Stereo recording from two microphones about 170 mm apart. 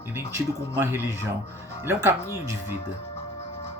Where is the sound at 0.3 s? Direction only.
10° right (ahead or behind).